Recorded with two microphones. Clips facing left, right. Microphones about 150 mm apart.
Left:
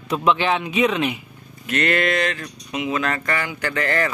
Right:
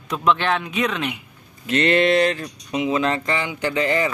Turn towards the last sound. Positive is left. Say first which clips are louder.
# right 2 dB
turn(degrees=-15)  # may be behind; listen again after turning